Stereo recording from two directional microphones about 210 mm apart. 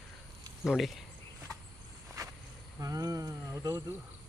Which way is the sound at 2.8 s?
15° right (ahead or behind).